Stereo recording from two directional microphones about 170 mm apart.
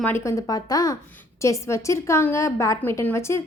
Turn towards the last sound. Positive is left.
turn(degrees=15)  # may be behind; listen again after turning